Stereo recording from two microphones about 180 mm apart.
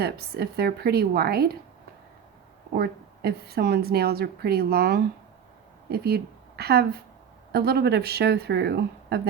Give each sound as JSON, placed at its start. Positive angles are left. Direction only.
{"t": 0.0, "sound": "a woman's voice", "side_deg": -60}
{"t": 2.7, "sound": "a woman's voice", "side_deg": -60}